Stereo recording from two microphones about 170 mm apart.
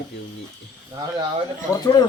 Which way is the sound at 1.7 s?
20° left (ahead or behind).